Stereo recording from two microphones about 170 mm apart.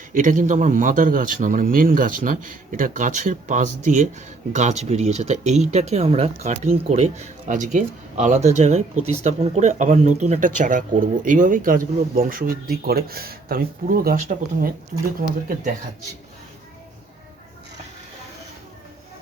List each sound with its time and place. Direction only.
0.1 s speech: 50° right (ahead or behind)